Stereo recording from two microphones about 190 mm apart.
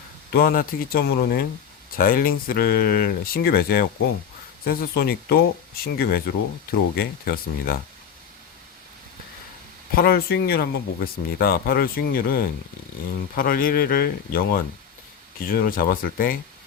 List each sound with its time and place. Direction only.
0.3 s speech: 50° left (ahead or behind)
9.9 s speech: 50° left (ahead or behind)